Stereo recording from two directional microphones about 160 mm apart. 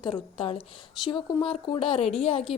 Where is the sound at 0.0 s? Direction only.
30° left (ahead or behind).